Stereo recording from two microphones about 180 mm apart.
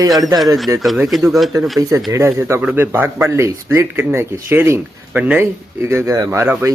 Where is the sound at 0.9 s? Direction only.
Centre (ahead or behind).